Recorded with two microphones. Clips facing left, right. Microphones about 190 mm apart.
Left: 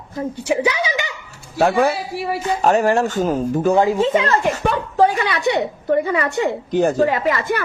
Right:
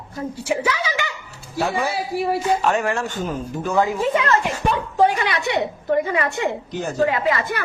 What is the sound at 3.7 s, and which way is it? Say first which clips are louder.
Speech: left 2 dB; 25° left (ahead or behind).